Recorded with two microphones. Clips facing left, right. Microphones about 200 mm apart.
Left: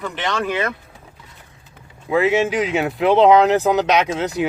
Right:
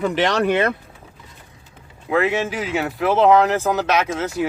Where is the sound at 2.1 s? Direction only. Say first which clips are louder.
Left 3 dB; 20° left (ahead or behind).